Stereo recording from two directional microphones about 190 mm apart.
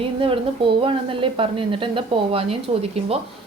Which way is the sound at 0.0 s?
30° right (ahead or behind).